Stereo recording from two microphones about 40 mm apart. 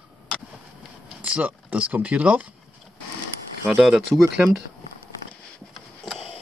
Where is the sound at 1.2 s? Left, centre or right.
Right.